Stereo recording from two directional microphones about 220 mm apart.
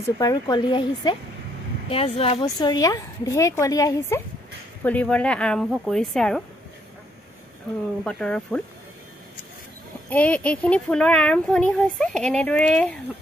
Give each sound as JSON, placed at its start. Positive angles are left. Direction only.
{"t": 0.2, "sound": "a woman's voice", "side_deg": 20}
{"t": 8.0, "sound": "speech", "side_deg": 5}
{"t": 10.0, "sound": "speech", "side_deg": 5}